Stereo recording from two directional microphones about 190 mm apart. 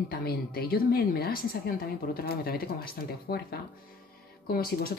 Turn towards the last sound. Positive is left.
turn(degrees=50)  # may be behind; listen again after turning